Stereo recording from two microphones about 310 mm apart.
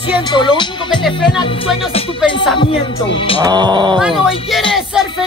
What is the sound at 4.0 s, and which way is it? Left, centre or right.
Music, centre.